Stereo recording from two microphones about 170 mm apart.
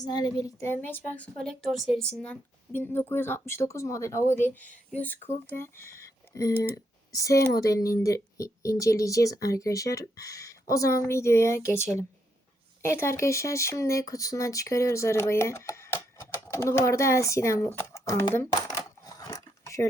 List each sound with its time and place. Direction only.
0.0 s speech: 25° left (ahead or behind)
12.8 s speech: 15° left (ahead or behind)
17.7 s crumpling: 15° left (ahead or behind)